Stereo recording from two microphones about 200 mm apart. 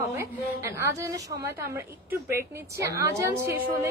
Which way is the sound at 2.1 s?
10° right (ahead or behind).